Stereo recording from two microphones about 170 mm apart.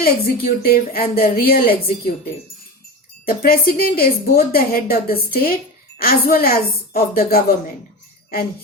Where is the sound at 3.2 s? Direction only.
60° left (ahead or behind).